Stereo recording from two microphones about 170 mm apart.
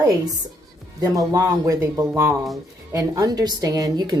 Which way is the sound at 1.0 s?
20° right (ahead or behind).